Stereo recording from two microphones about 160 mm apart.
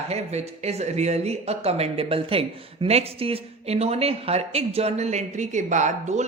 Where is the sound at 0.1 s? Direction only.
45° right (ahead or behind).